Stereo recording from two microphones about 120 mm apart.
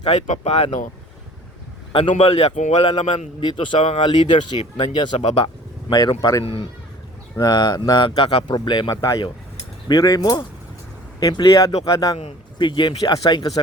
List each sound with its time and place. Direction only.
0.1 s speech: 70° left (ahead or behind)
1.9 s a man's voice: 45° left (ahead or behind); by 2.8 s 65° left (ahead or behind)
3.4 s a man's voice: 45° left (ahead or behind)
5.9 s speech: 35° left (ahead or behind)
6.4 s speech: 50° left (ahead or behind)
7.3 s speech: 35° left (ahead or behind); by 8.5 s 50° left (ahead or behind)
8.5 s speech: 40° left (ahead or behind)
12.1 s speech: 40° left (ahead or behind)